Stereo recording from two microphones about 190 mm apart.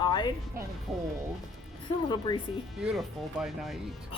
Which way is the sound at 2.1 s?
25° left (ahead or behind).